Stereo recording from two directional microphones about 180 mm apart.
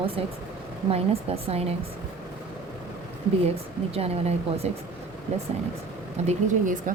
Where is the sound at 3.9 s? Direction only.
35° right (ahead or behind).